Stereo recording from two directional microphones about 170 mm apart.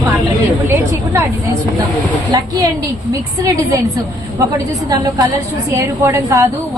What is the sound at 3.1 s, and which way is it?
Speech, 20° right (ahead or behind).